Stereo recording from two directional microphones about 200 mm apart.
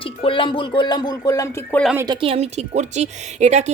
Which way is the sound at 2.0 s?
25° right (ahead or behind).